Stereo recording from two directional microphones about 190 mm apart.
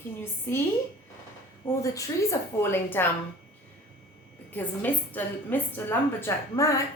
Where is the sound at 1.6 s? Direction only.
15° left (ahead or behind).